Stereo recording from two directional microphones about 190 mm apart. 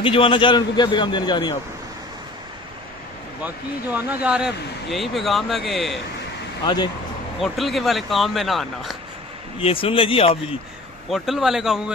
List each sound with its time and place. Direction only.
0.0 s a man's voice: 25° left (ahead or behind)
3.4 s speech: 10° right (ahead or behind)
6.6 s a man's voice: 25° left (ahead or behind)
7.3 s speech: centre (ahead or behind)
9.6 s a man's voice: 30° left (ahead or behind)
11.1 s speech: centre (ahead or behind)